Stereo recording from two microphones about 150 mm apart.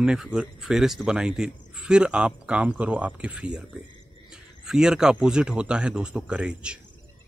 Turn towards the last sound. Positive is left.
turn(degrees=-5)  # may be behind; listen again after turning